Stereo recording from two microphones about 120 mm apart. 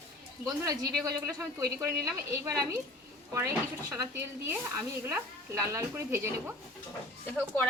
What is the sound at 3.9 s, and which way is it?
A woman's voice, 25° right (ahead or behind).